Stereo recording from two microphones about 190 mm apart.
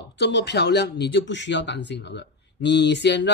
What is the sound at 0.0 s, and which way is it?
Speech, 65° left (ahead or behind).